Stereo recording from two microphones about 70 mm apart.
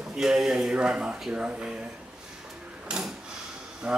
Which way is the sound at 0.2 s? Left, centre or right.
Centre.